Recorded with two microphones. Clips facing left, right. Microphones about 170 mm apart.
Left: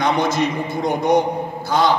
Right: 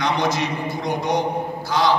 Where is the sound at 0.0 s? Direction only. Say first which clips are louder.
Left 3 dB; 55° left (ahead or behind).